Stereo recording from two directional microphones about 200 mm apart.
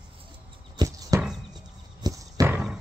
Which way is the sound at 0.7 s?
20° right (ahead or behind).